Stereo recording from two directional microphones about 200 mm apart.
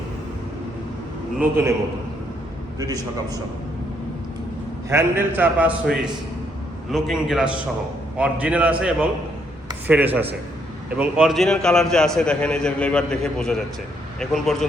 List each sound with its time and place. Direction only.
1.4 s a man's voice: 10° right (ahead or behind)
2.7 s a man's voice: 20° right (ahead or behind)
4.9 s a man's voice: 10° right (ahead or behind)